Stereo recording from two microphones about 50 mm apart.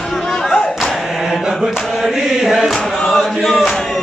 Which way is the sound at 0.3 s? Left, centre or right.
Centre.